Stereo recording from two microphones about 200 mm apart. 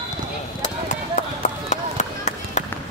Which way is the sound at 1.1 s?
35° left (ahead or behind).